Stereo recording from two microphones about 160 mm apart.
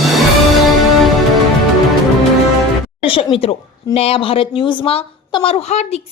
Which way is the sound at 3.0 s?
35° left (ahead or behind).